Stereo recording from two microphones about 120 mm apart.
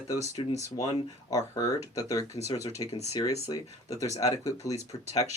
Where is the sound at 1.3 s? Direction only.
30° left (ahead or behind).